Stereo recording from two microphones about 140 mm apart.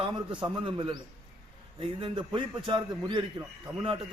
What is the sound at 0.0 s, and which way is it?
A man's voice, 35° right (ahead or behind).